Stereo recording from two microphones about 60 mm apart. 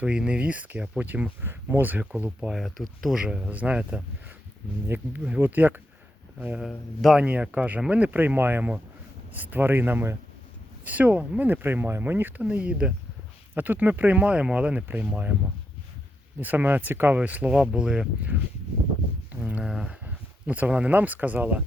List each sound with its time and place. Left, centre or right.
0.0 s speech: centre
2.5 s speech: centre
3.2 s speech: centre
3.4 s speech: right
4.9 s speech: right
7.2 s speech: right
10.8 s speech: right
12.4 s speech: right
16.4 s speech: right
17.2 s speech: right
19.3 s a sound: right
19.6 s speech: centre
20.1 s speech: right